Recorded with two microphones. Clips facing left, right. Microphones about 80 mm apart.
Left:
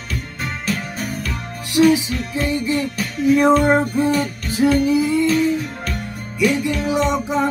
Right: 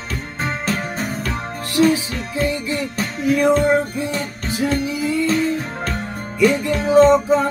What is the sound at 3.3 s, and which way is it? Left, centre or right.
Music, left.